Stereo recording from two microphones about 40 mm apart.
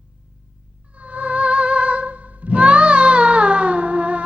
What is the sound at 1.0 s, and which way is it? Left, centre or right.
Music, right.